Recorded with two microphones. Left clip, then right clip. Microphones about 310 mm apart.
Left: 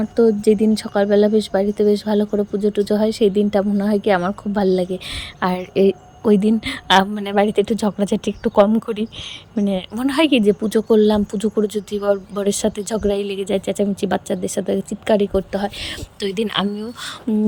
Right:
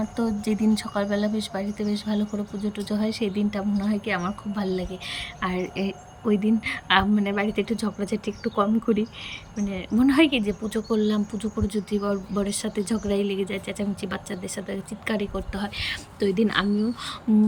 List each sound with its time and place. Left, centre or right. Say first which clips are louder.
0.2 s a woman's voice: left 14 dB; centre
16.2 s a woman's voice: left 2 dB; left